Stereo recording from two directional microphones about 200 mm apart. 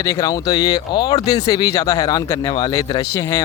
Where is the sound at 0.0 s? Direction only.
15° left (ahead or behind).